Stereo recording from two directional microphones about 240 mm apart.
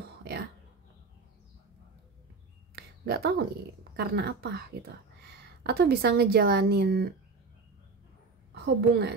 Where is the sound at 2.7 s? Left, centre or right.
Right.